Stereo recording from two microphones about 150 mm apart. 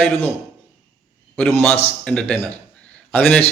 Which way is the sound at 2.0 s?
5° left (ahead or behind).